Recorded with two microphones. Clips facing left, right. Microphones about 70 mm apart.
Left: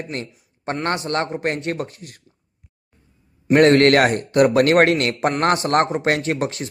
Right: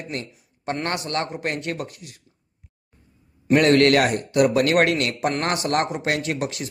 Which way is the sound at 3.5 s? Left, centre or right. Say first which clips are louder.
Left 3 dB; left.